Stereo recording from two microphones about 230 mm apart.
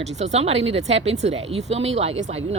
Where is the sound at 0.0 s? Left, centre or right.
Right.